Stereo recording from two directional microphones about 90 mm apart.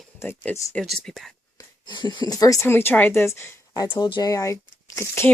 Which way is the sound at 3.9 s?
50° left (ahead or behind).